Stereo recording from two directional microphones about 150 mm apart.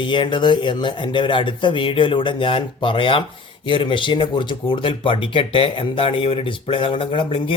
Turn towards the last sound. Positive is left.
turn(degrees=35)  # may be behind; listen again after turning